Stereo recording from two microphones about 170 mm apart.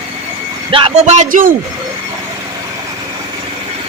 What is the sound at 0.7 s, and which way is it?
Speech, 30° right (ahead or behind).